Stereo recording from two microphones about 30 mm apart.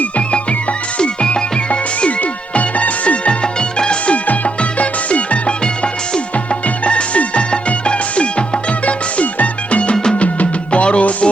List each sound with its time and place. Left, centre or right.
0.2 s music: left
2.0 s music: left
3.4 s music: left
4.0 s music: left
5.6 s music: left
9.9 s music: left
10.2 s music: left